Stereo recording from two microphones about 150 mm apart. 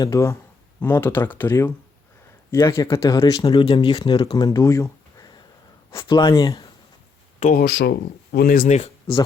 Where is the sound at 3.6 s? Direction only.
35° left (ahead or behind).